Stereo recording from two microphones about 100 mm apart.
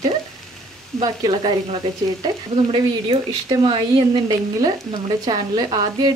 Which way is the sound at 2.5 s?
65° right (ahead or behind).